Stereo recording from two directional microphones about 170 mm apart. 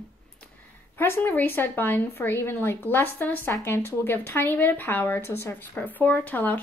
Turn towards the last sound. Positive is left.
turn(degrees=10)  # may be behind; listen again after turning